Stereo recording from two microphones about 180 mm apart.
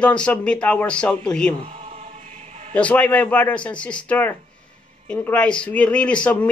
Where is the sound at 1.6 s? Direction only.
35° right (ahead or behind).